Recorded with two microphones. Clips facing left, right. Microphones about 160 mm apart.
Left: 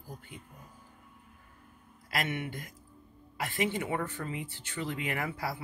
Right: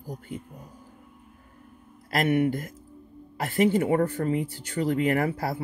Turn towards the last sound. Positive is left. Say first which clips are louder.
# right 11 dB
turn(degrees=-45)  # may be behind; listen again after turning